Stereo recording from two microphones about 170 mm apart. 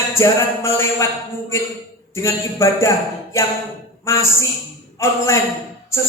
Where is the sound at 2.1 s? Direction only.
15° left (ahead or behind).